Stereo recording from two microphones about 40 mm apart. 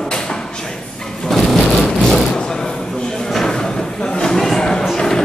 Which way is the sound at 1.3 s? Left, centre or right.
Centre.